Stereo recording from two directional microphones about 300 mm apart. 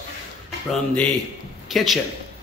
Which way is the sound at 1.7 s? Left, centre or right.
Centre.